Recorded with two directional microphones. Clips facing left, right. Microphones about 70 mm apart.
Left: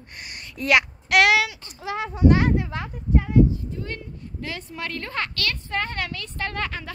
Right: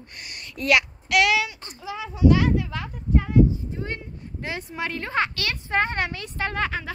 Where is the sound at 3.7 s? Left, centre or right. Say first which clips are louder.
Right 1 dB; right.